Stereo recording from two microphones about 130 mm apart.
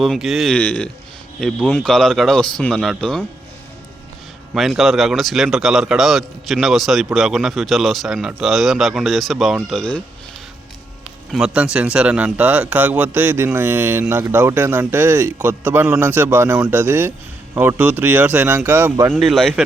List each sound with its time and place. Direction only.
0.0 s speech: centre (ahead or behind)
4.5 s speech: centre (ahead or behind)
11.3 s a man's voice: 5° right (ahead or behind)
19.1 s speech: centre (ahead or behind)